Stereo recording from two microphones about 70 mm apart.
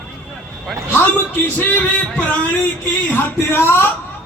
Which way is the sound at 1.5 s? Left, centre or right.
Left.